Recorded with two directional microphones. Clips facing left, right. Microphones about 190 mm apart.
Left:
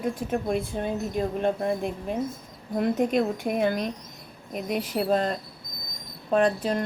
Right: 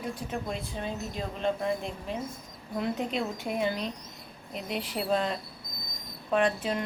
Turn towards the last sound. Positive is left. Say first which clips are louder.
# left 4 dB
turn(degrees=35)  # may be behind; listen again after turning